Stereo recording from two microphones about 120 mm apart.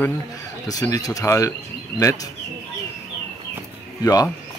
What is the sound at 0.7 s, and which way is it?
Speech, 30° left (ahead or behind).